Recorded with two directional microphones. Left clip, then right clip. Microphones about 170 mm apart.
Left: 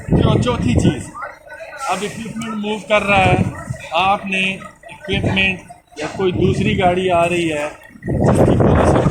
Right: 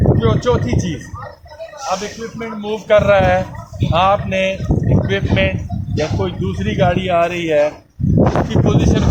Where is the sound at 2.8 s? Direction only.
50° right (ahead or behind).